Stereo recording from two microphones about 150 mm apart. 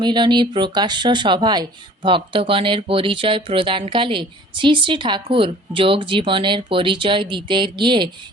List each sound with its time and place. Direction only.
0.0 s speech: 30° right (ahead or behind)